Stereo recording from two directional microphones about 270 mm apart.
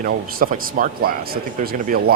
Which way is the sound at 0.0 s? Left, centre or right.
Right.